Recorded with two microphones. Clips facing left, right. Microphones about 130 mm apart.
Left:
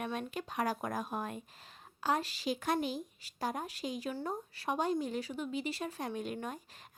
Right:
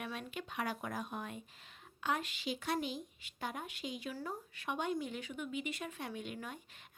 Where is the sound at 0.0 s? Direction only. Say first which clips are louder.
Left 5 dB; 40° left (ahead or behind).